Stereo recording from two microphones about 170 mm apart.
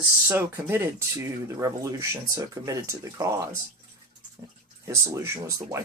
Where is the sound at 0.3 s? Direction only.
15° right (ahead or behind).